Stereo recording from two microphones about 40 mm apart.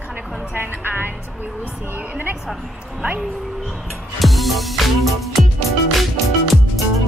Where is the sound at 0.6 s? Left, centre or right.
Right.